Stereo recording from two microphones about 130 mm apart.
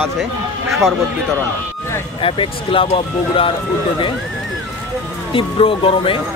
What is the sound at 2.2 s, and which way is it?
Speech, 45° left (ahead or behind).